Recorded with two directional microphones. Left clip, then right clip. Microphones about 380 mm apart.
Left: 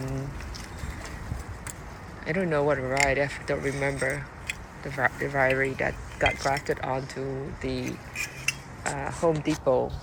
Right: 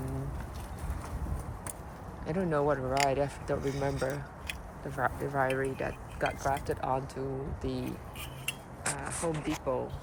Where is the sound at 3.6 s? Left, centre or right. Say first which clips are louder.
Left 5 dB; right.